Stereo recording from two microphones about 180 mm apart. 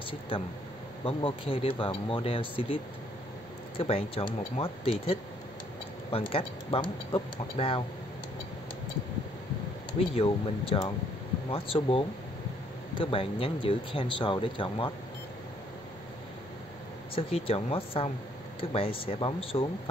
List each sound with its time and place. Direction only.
1.0 s speech: 30° left (ahead or behind)
9.9 s speech: 30° left (ahead or behind)
17.1 s speech: 30° left (ahead or behind)